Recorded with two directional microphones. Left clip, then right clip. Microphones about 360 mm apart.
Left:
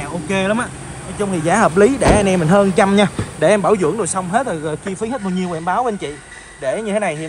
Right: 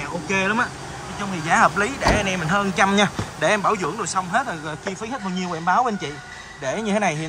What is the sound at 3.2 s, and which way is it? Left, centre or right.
Speech, left.